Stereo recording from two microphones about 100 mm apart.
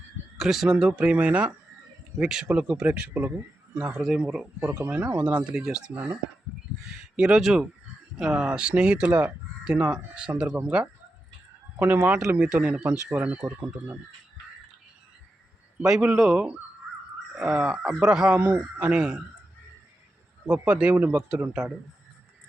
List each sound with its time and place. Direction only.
0.3 s speech: 5° right (ahead or behind)
7.2 s speech: 5° right (ahead or behind)
15.8 s speech: 10° right (ahead or behind)
18.3 s speech: 20° right (ahead or behind)
20.5 s speech: 10° right (ahead or behind)